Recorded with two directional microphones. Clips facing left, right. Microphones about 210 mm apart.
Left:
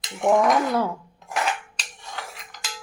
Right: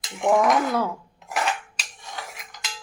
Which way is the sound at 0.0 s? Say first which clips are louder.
Left 1 dB; centre (ahead or behind).